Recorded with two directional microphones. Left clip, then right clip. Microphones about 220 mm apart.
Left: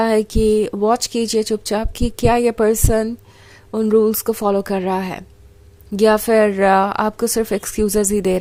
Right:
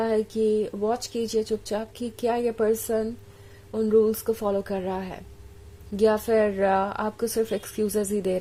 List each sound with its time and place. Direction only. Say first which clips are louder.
0.0 s speech: left 8 dB; 30° left (ahead or behind)